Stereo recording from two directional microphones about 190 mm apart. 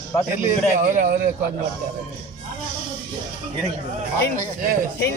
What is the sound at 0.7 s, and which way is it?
Speech, 45° right (ahead or behind).